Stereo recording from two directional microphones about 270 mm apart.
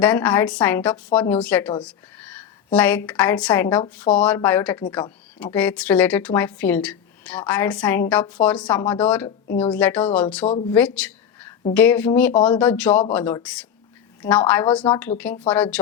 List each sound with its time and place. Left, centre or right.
0.0 s speech: centre
1.8 s a sound: centre
2.7 s speech: centre
10.4 s speech: left
10.7 s a sound: centre
11.7 s speech: centre